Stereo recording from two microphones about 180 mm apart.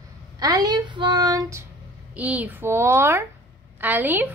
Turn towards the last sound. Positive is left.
turn(degrees=-10)  # may be behind; listen again after turning